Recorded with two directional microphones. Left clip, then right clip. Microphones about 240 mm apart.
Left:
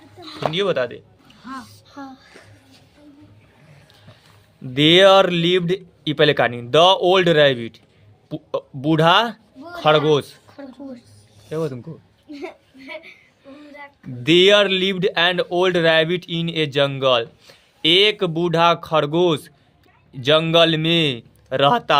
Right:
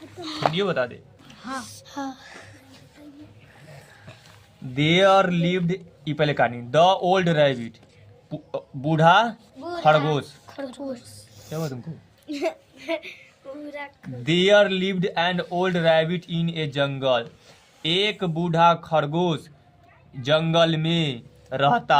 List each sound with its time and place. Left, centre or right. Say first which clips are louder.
0.5 s speech: left 4 dB; left
1.6 s speech: right 4 dB; right
4.7 s speech: left 6 dB; left
10.4 s speech: right 4 dB; right
12.3 s a woman's voice: right 7 dB; right
14.3 s speech: left 4 dB; left